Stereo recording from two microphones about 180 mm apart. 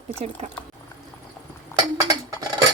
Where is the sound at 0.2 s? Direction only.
30° right (ahead or behind).